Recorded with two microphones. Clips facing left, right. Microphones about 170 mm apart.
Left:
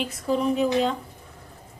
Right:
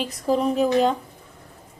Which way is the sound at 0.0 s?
35° right (ahead or behind).